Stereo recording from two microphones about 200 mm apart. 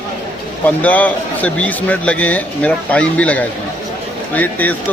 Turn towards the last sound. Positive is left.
turn(degrees=10)  # may be behind; listen again after turning